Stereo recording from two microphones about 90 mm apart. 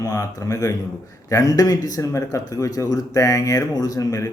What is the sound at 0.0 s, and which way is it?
Speech, 40° left (ahead or behind).